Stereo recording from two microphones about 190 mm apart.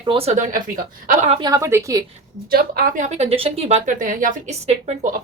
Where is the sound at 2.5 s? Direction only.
45° right (ahead or behind).